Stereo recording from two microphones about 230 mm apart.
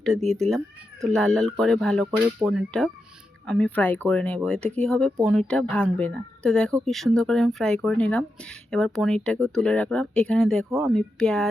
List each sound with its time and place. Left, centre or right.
0.0 s speech: centre